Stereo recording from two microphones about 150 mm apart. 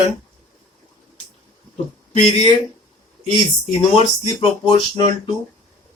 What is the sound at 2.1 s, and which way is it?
Speech, 45° left (ahead or behind).